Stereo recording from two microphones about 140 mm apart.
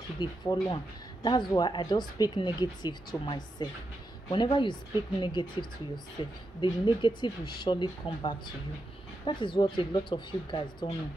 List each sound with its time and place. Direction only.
0.2 s speech: 30° left (ahead or behind)